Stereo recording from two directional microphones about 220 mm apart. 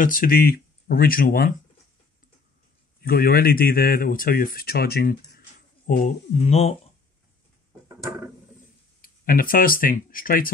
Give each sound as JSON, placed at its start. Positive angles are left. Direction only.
{"t": 0.0, "sound": "speech", "side_deg": 40}
{"t": 3.0, "sound": "speech", "side_deg": 45}
{"t": 9.0, "sound": "speech", "side_deg": 40}